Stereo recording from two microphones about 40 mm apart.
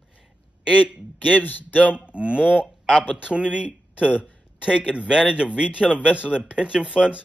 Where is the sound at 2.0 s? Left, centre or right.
Right.